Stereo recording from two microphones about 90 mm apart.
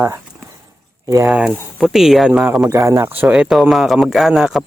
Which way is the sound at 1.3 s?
15° right (ahead or behind).